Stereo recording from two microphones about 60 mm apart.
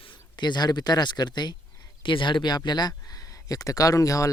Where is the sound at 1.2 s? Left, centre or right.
Left.